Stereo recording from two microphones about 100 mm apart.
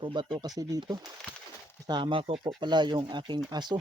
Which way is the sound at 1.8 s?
50° right (ahead or behind).